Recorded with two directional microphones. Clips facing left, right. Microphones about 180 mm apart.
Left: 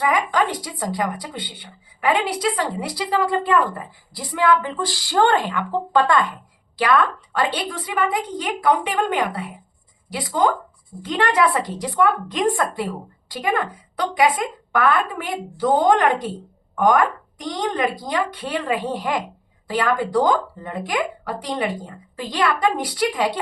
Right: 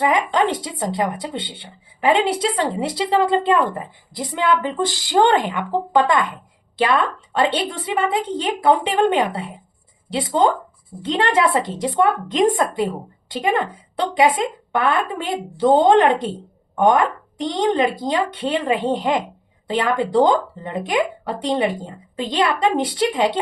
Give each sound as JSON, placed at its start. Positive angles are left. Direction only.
{"t": 0.0, "sound": "speech", "side_deg": -25}